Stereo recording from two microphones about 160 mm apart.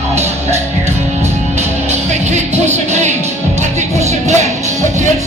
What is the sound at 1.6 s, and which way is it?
Music, 45° right (ahead or behind).